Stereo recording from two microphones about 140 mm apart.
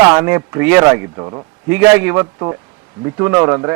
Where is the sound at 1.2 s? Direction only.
35° right (ahead or behind).